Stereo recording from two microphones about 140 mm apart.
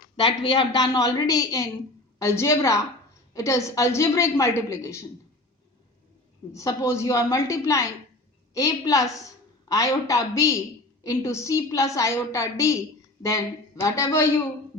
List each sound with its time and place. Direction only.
0.2 s speech: 40° left (ahead or behind)
0.9 s a woman's voice: 25° left (ahead or behind)
6.5 s a woman's voice: 20° left (ahead or behind)